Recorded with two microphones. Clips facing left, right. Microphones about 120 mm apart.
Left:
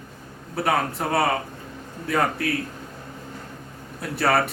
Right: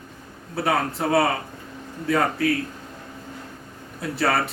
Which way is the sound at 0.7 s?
Centre (ahead or behind).